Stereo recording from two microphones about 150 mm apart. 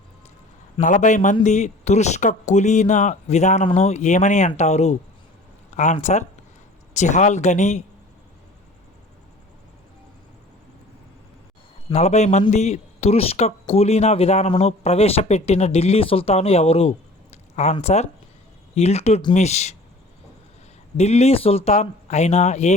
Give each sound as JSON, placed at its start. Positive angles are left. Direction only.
{"t": 0.8, "sound": "a man's voice", "side_deg": 55}
{"t": 11.9, "sound": "a man's voice", "side_deg": 45}
{"t": 20.9, "sound": "a man's voice", "side_deg": 45}